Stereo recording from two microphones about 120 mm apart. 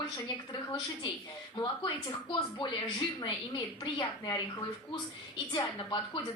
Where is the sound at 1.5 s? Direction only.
30° left (ahead or behind).